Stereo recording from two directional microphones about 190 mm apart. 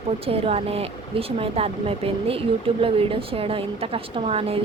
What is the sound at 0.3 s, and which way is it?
A woman's voice, 30° right (ahead or behind).